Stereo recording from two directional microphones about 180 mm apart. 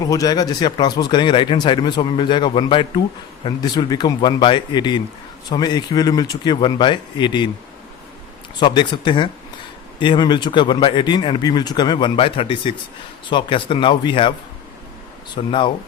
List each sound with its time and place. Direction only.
0.0 s speech: 20° left (ahead or behind)
8.6 s speech: 25° left (ahead or behind)
15.4 s speech: 30° left (ahead or behind)